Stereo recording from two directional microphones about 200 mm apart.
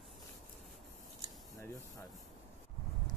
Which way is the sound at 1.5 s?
15° left (ahead or behind).